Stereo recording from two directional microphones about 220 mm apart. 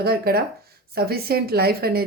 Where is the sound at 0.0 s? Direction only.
45° right (ahead or behind).